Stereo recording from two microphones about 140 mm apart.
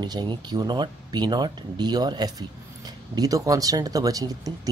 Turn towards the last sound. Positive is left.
turn(degrees=-25)  # may be behind; listen again after turning